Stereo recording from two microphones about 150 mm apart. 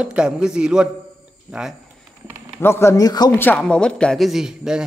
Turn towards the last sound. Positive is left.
turn(degrees=-5)  # may be behind; listen again after turning